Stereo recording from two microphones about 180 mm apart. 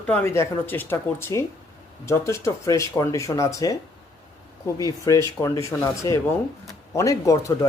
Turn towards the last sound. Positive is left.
turn(degrees=20)  # may be behind; listen again after turning